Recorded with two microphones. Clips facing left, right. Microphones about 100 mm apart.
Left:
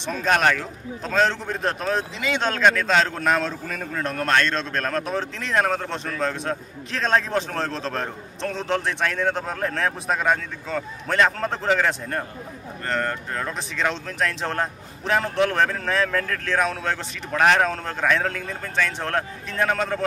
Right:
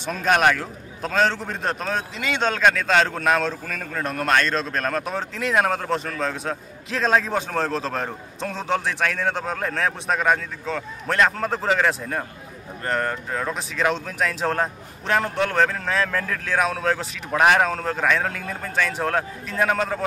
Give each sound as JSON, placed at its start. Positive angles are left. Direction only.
{"t": 0.0, "sound": "a man's voice", "side_deg": -5}